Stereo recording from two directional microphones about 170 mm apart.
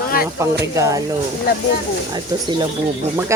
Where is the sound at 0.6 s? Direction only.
20° right (ahead or behind).